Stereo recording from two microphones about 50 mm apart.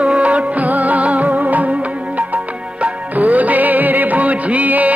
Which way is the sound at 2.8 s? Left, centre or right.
Right.